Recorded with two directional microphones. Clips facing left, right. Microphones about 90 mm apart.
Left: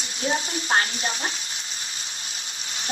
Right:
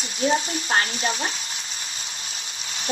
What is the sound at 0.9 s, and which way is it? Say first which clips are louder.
Frying: right 3 dB; 30° right (ahead or behind).